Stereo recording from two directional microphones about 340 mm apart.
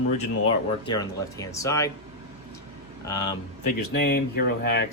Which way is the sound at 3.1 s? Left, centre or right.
Centre.